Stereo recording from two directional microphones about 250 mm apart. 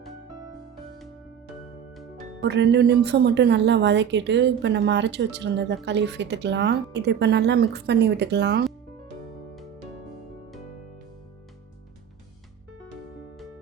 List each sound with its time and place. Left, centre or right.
2.4 s a woman's voice: right